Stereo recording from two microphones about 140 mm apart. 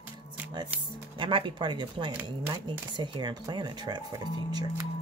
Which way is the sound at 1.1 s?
40° right (ahead or behind).